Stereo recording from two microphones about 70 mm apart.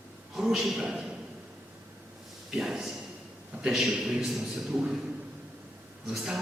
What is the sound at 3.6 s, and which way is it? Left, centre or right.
A man's voice, centre.